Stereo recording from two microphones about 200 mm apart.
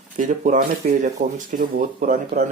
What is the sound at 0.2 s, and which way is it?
Speech, 40° right (ahead or behind).